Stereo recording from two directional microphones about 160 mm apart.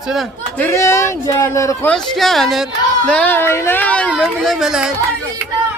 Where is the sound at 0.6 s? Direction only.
15° left (ahead or behind).